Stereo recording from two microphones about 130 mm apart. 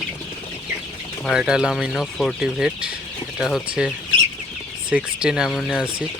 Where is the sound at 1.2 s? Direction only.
5° right (ahead or behind).